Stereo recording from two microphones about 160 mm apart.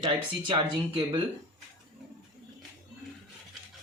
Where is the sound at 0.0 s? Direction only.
30° right (ahead or behind).